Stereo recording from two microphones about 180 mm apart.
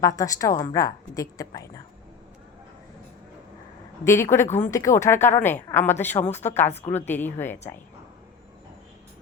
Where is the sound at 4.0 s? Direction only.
15° left (ahead or behind).